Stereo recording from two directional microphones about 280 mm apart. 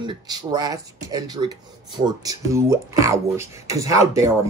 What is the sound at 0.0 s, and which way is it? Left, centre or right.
Speech, centre.